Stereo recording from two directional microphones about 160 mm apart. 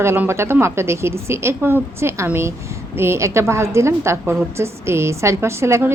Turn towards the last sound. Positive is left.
turn(degrees=-15)  # may be behind; listen again after turning